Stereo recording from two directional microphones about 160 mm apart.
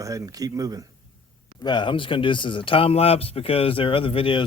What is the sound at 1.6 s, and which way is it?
Speech, 30° left (ahead or behind).